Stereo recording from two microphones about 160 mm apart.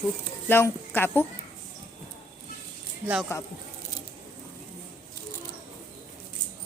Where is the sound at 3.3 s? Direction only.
15° left (ahead or behind).